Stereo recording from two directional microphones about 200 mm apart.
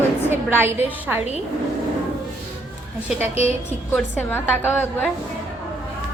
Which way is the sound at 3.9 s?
10° left (ahead or behind).